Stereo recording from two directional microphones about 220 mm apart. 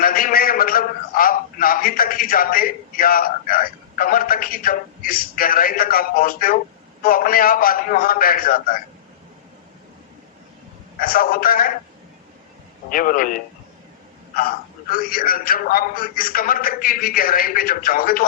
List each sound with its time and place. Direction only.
0.0 s a man's voice: 40° left (ahead or behind)
11.0 s a man's voice: 40° left (ahead or behind)
12.9 s a man's voice: 40° left (ahead or behind)